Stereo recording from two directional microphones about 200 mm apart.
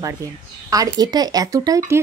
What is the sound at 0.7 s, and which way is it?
Speech, 20° right (ahead or behind).